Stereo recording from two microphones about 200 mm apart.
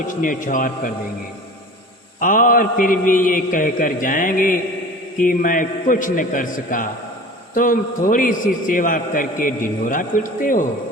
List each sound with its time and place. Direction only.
0.0 s speech: 40° left (ahead or behind)
2.1 s a man's voice: 40° left (ahead or behind)